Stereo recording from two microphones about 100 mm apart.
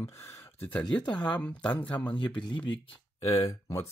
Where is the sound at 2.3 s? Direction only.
50° left (ahead or behind).